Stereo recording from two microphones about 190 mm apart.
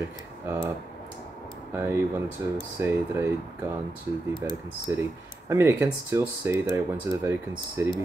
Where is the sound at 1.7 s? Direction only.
15° right (ahead or behind).